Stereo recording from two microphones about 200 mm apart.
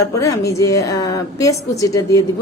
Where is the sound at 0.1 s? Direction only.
15° left (ahead or behind).